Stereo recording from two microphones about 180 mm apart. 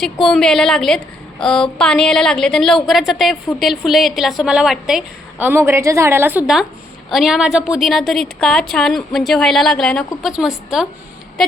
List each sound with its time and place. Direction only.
0.0 s a woman's voice: centre (ahead or behind)